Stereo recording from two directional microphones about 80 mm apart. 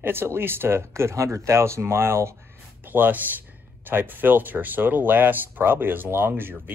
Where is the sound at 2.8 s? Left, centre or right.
Right.